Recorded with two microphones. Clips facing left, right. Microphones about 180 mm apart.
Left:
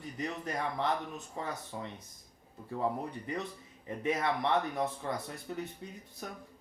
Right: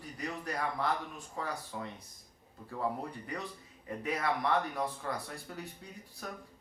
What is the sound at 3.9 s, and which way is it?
Speech, 25° left (ahead or behind).